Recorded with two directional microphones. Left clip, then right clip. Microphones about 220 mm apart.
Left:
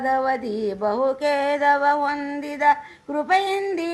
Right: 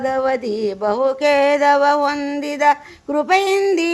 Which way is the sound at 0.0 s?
45° right (ahead or behind).